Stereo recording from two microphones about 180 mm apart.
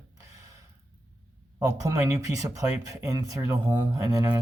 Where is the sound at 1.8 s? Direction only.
15° right (ahead or behind).